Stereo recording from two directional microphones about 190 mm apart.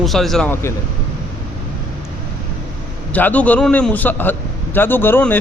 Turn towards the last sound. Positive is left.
turn(degrees=10)  # may be behind; listen again after turning